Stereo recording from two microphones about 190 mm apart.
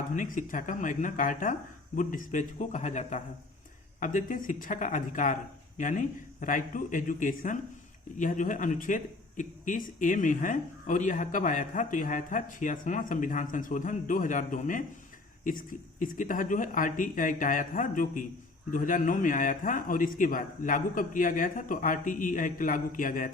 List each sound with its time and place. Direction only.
0.2 s speech: 45° left (ahead or behind)